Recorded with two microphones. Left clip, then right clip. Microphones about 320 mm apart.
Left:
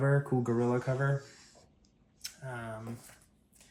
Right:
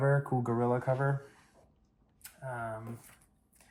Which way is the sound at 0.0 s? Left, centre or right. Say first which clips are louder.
Even; centre.